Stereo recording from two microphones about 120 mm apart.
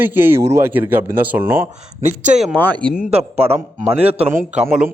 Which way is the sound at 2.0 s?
80° right.